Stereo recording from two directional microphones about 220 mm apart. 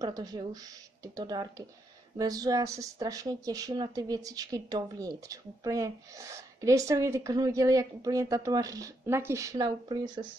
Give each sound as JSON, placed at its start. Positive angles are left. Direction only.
{"t": 0.0, "sound": "speech", "side_deg": -15}